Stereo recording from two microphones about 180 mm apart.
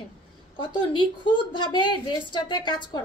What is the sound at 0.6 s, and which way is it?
A woman's voice, 25° left (ahead or behind).